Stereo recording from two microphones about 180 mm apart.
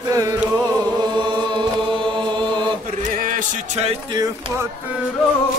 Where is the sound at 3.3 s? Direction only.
40° right (ahead or behind).